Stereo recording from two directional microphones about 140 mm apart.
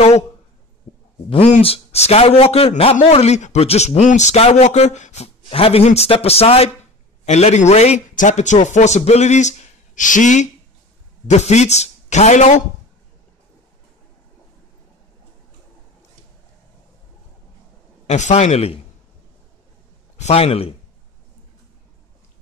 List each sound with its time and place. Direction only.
1.6 s speech: 45° left (ahead or behind)
7.2 s a man's voice: 55° left (ahead or behind)
18.0 s a man's voice: 55° left (ahead or behind)
20.2 s speech: 50° left (ahead or behind)